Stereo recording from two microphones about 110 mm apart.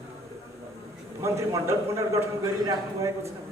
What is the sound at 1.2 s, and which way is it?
A man's voice, 25° right (ahead or behind).